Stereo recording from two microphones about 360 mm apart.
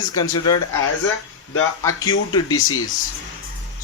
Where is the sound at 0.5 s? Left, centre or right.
Left.